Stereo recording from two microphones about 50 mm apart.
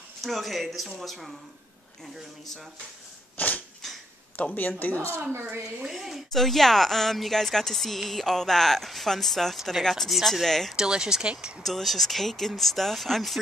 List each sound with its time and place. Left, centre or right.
0.2 s speech: centre
3.3 s dog: left
3.8 s a sound: centre
4.4 s speech: left
5.3 s a woman's voice: right
5.8 s speech: centre
10.7 s speech: centre
11.6 s speech: centre